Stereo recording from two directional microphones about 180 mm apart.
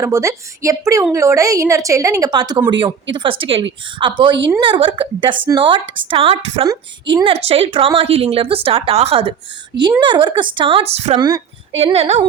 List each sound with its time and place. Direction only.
0.0 s a woman's voice: 15° right (ahead or behind); by 11.2 s 35° right (ahead or behind)
11.2 s speech: 20° right (ahead or behind)
11.8 s a woman's voice: 30° right (ahead or behind)